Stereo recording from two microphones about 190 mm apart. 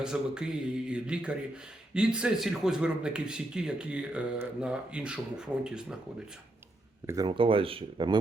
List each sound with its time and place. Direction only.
0.0 s a man's voice: 5° right (ahead or behind)
7.1 s speech: 20° right (ahead or behind)